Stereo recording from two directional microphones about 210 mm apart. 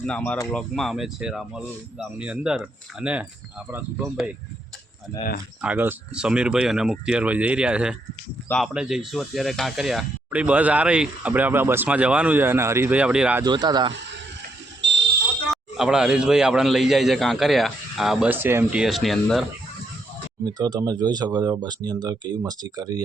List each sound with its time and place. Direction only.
0.0 s speech: 5° left (ahead or behind)
5.6 s speech: 10° right (ahead or behind)
13.4 s speech: 20° right (ahead or behind)
14.8 s fire alarm: 60° right (ahead or behind)
15.4 s speech: 5° right (ahead or behind)
20.4 s speech: 20° right (ahead or behind)